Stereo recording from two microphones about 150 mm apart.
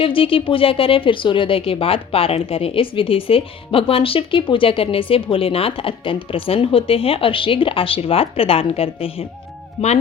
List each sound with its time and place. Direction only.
0.0 s a woman's voice: 35° left (ahead or behind)